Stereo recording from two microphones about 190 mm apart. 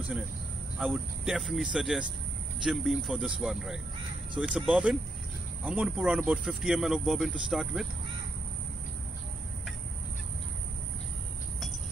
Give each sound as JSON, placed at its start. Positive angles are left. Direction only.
{"t": 0.7, "sound": "speech", "side_deg": -5}